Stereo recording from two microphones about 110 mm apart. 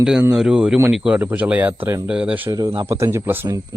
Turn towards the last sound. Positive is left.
turn(degrees=-30)  # may be behind; listen again after turning